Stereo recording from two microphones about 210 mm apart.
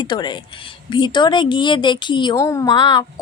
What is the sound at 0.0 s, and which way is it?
Speech, 20° left (ahead or behind).